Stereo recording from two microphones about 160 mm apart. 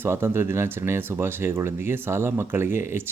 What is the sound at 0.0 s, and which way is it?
Speech, 15° right (ahead or behind).